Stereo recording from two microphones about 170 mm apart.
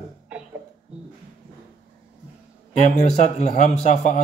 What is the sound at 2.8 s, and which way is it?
Speech, 45° left (ahead or behind).